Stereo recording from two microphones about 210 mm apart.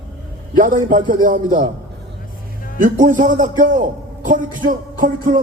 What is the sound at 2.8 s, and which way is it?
A man's voice, 40° right (ahead or behind).